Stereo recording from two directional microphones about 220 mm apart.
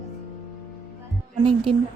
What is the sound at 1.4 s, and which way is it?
Speech, 25° right (ahead or behind).